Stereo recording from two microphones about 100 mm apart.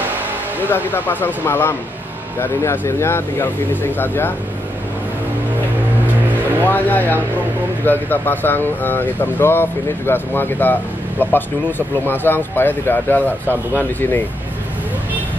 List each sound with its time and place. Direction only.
0.7 s speech: 20° left (ahead or behind)
6.6 s speech: 20° left (ahead or behind)